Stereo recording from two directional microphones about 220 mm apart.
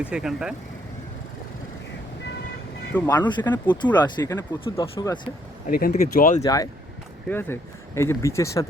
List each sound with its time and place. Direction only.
0.0 s speech: 5° right (ahead or behind)
2.9 s speech: 10° left (ahead or behind)
3.2 s speech: 20° left (ahead or behind)
5.6 s speech: 40° left (ahead or behind)
6.4 s speech: 15° left (ahead or behind)